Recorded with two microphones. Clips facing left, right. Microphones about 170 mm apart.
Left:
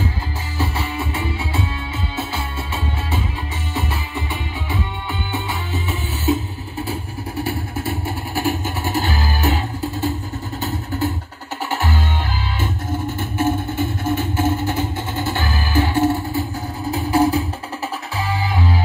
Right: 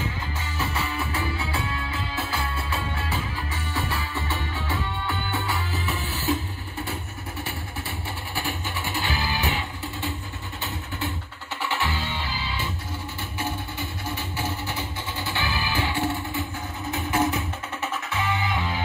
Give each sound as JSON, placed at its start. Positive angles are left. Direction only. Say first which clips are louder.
{"t": 0.6, "sound": "music", "louder": "left 5 dB", "side_deg": 25}
{"t": 7.4, "sound": "music", "louder": "left 10 dB", "side_deg": 40}
{"t": 11.6, "sound": "music", "louder": "left 5 dB", "side_deg": 45}